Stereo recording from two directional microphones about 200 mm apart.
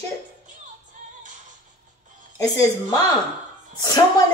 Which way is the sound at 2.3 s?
20° left (ahead or behind).